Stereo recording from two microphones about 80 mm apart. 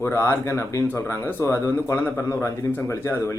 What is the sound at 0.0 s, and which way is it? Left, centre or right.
Speech, left.